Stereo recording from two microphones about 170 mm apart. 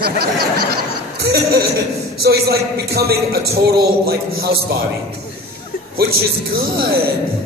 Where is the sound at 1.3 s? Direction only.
70° right (ahead or behind).